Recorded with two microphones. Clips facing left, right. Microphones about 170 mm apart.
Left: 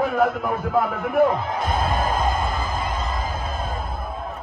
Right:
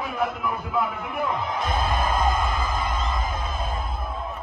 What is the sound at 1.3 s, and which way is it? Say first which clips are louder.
Music: left 4 dB; 30° left (ahead or behind).